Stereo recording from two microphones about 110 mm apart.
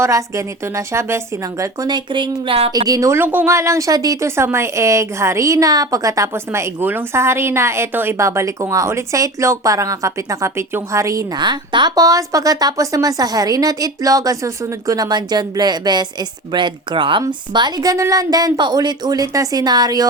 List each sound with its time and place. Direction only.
0.0 s speech: 30° right (ahead or behind)
2.1 s speech: 45° right (ahead or behind)
2.7 s speech: 35° right (ahead or behind)
11.3 s speech: 45° right (ahead or behind)